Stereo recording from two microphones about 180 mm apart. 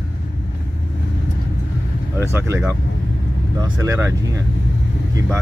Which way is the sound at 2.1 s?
15° right (ahead or behind).